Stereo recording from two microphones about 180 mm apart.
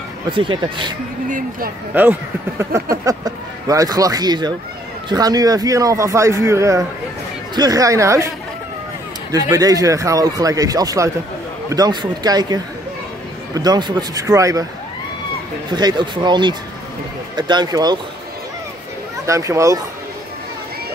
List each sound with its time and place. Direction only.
0.3 s speech: 25° right (ahead or behind)
1.9 s speech: 10° right (ahead or behind)
9.3 s speech: 20° right (ahead or behind)
13.6 s speech: 25° right (ahead or behind)
15.7 s speech: 25° right (ahead or behind)
19.2 s speech: 15° right (ahead or behind)